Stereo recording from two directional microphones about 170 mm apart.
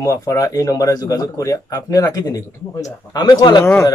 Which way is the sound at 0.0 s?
20° left (ahead or behind).